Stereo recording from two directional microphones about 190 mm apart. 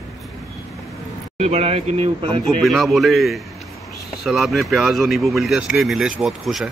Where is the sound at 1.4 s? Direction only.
35° right (ahead or behind).